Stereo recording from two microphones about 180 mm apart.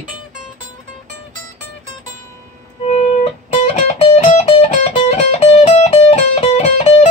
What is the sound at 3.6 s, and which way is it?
Music, 35° left (ahead or behind).